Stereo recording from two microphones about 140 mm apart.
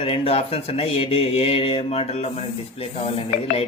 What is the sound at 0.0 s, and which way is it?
Speech, 45° left (ahead or behind).